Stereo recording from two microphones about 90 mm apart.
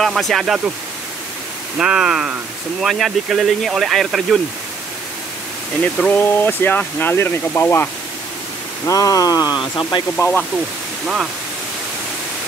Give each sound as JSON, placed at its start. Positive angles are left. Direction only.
{"t": 0.0, "sound": "speech", "side_deg": 0}
{"t": 1.8, "sound": "speech", "side_deg": -10}
{"t": 6.0, "sound": "speech", "side_deg": 25}
{"t": 8.8, "sound": "speech", "side_deg": 40}
{"t": 10.1, "sound": "speech", "side_deg": 25}